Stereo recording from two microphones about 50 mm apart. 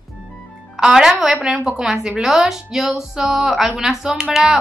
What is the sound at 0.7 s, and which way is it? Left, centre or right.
A woman's voice, centre.